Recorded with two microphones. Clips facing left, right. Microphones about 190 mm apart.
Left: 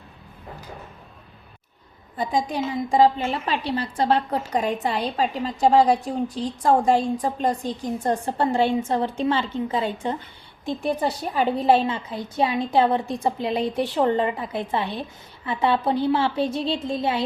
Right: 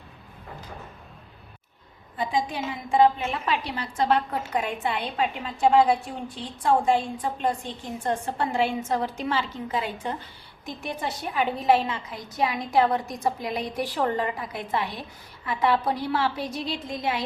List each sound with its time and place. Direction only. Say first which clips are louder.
2.1 s a woman's voice: left 3 dB; 40° left (ahead or behind)